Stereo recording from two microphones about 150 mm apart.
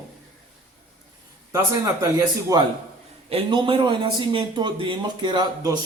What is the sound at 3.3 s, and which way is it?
A man's voice, 35° right (ahead or behind).